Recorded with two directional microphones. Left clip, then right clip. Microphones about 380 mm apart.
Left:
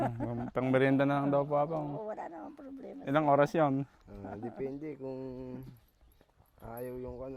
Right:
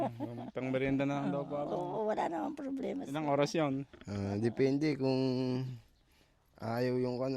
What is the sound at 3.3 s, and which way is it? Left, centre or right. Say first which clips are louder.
Speech: left 4 dB; centre.